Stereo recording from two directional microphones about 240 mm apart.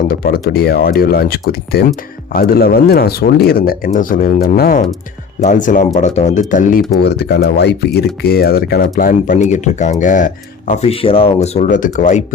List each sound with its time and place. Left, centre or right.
0.1 s speech: left
7.0 s speech: left